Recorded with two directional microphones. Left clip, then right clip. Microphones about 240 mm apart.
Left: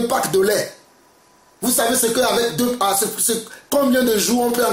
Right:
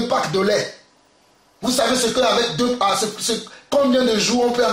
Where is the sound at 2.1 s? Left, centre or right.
Left.